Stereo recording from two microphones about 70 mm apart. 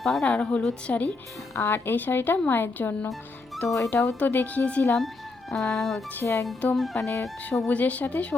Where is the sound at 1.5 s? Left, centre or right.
Left.